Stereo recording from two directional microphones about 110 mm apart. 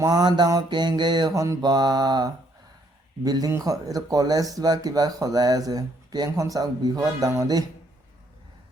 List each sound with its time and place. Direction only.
0.0 s speech: 35° right (ahead or behind)
1.3 s speech: 30° right (ahead or behind)